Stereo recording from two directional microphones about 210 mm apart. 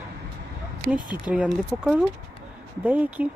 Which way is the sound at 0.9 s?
20° left (ahead or behind).